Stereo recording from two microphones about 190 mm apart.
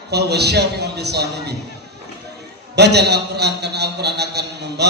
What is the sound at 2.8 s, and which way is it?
A man's voice, 60° right (ahead or behind).